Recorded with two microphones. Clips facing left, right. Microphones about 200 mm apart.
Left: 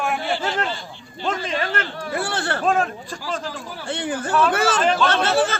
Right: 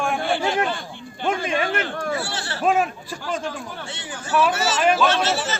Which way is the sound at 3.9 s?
55° left (ahead or behind).